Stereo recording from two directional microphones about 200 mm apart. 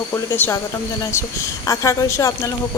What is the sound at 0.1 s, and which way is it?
A woman's voice, 10° left (ahead or behind).